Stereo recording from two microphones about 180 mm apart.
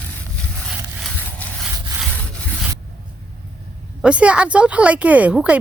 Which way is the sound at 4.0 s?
5° right (ahead or behind).